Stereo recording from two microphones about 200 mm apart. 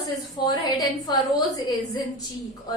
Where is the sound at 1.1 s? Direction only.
20° left (ahead or behind).